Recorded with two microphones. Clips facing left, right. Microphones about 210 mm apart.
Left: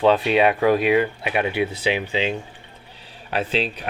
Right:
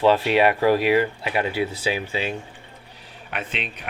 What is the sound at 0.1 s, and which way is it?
Speech, 20° left (ahead or behind).